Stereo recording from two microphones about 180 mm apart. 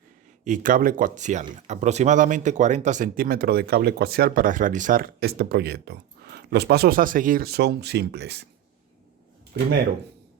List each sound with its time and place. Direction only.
0.4 s speech: 45° right (ahead or behind); by 8.4 s 65° right (ahead or behind)